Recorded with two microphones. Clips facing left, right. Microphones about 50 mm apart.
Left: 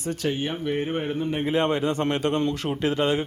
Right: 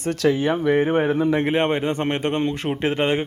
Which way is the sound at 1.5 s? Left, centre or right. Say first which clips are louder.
Right 2 dB; right.